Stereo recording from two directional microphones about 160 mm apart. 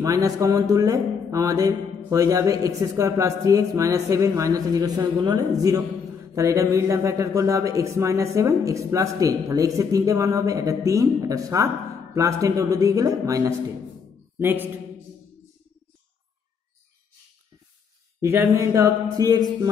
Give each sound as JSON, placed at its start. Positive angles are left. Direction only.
{"t": 0.0, "sound": "a man's voice", "side_deg": -20}
{"t": 18.2, "sound": "speech", "side_deg": -15}